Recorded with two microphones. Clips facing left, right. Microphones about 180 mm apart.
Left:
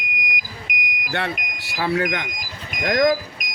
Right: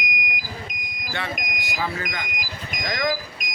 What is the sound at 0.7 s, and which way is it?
Smoke detector, 65° left (ahead or behind).